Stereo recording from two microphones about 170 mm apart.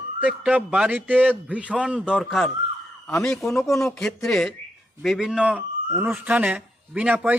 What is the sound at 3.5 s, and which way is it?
Speech, 20° left (ahead or behind).